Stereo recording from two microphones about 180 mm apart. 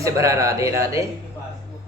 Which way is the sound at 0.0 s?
15° right (ahead or behind).